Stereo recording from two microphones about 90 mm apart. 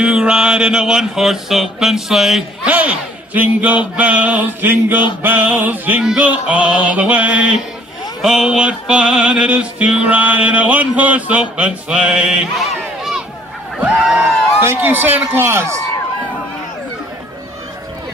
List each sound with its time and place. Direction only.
0.0 s music: 10° right (ahead or behind)
2.7 s music: 15° right (ahead or behind)
5.2 s a sound: 20° right (ahead or behind)
6.0 s music: 15° right (ahead or behind)
12.5 s crowd: 5° right (ahead or behind)
13.7 s a man's voice: 15° right (ahead or behind)